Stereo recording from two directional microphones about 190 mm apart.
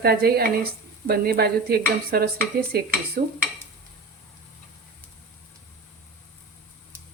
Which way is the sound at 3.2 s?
55° right (ahead or behind).